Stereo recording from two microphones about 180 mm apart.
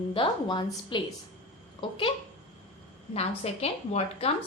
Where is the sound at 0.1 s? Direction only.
25° left (ahead or behind).